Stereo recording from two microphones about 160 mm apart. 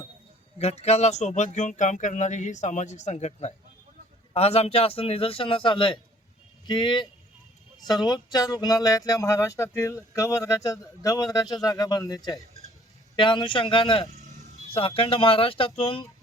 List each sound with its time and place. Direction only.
0.6 s a man's voice: 40° left (ahead or behind)